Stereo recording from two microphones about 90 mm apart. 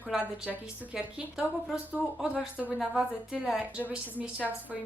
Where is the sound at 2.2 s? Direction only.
15° right (ahead or behind).